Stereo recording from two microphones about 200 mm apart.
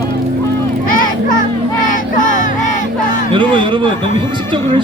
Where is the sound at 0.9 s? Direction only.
45° left (ahead or behind).